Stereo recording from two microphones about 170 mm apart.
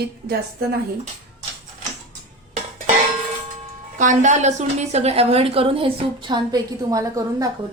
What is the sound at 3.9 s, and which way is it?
A woman's voice, 50° right (ahead or behind).